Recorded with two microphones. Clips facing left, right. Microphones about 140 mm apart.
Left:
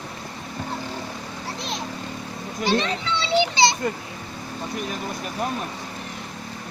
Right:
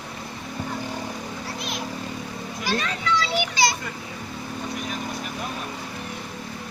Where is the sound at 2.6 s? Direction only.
25° left (ahead or behind).